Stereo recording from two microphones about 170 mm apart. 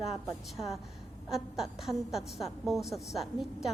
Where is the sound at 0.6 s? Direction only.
20° left (ahead or behind).